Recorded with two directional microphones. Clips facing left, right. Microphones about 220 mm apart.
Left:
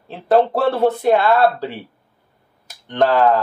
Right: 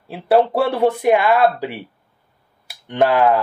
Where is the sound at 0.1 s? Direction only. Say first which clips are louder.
Even; 10° right (ahead or behind).